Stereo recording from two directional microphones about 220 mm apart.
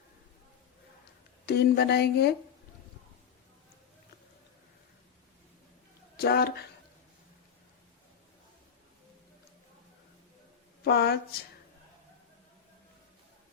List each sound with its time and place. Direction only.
1.5 s speech: 45° left (ahead or behind)
6.1 s speech: 45° left (ahead or behind)
10.8 s speech: 45° left (ahead or behind)